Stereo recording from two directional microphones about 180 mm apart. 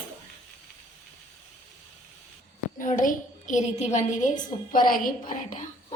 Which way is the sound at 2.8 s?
50° left (ahead or behind).